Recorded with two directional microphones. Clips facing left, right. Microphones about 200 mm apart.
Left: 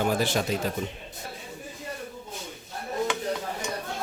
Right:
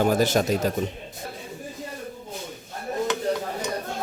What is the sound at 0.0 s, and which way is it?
Speech, 45° right (ahead or behind).